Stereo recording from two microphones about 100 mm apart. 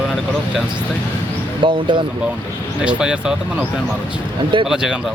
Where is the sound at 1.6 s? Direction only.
55° right (ahead or behind).